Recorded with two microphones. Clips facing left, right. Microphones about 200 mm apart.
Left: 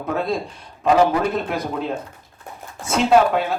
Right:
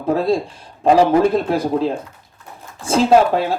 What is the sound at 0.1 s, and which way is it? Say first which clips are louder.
Speech: right 6 dB; 30° right (ahead or behind).